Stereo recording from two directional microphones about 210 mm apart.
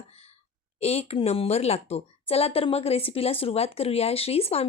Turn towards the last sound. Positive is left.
turn(degrees=30)  # may be behind; listen again after turning